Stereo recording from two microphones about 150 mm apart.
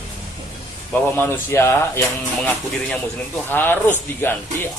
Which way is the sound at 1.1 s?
15° left (ahead or behind).